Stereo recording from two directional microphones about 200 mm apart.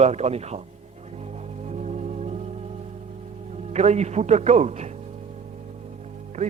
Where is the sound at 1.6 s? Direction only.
35° right (ahead or behind).